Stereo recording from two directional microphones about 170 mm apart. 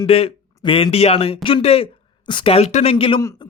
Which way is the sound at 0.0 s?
35° left (ahead or behind).